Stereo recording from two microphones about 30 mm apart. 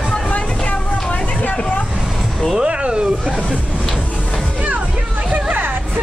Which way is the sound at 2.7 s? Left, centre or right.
Right.